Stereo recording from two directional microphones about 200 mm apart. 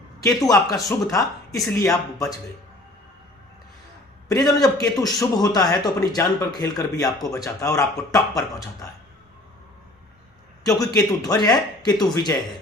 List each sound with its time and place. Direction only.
0.2 s a man's voice: 20° left (ahead or behind)
4.3 s a man's voice: 20° left (ahead or behind)
10.6 s a man's voice: 15° left (ahead or behind)